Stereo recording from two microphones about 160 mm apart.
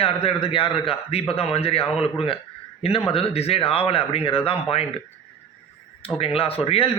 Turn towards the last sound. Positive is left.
turn(degrees=35)  # may be behind; listen again after turning